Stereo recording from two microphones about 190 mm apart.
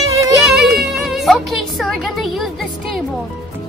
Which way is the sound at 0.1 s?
15° right (ahead or behind).